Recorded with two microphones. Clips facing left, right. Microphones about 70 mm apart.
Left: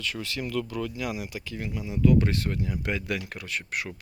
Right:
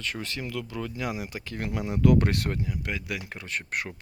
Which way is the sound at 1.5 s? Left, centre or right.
Right.